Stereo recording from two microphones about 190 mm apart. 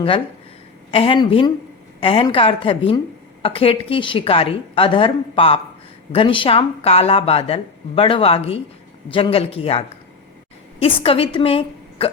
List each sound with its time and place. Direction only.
0.9 s a woman's voice: 30° left (ahead or behind)